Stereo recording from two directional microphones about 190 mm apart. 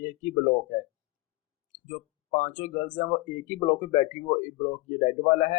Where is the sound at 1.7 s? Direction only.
40° left (ahead or behind).